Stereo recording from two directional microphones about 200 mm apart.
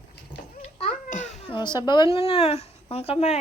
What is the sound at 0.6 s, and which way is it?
Babbling, 35° left (ahead or behind).